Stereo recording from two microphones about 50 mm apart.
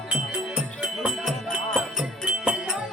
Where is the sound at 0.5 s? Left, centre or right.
Centre.